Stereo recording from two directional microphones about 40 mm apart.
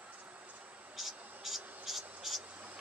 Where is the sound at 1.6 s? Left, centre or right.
Right.